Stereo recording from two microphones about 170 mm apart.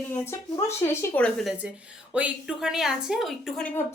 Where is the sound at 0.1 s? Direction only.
15° left (ahead or behind).